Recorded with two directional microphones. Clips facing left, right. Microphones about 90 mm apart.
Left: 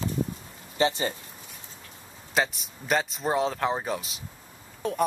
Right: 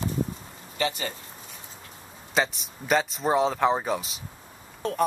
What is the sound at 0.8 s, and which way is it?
Speech, 30° left (ahead or behind).